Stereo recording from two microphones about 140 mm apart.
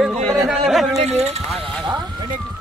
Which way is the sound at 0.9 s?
50° right (ahead or behind).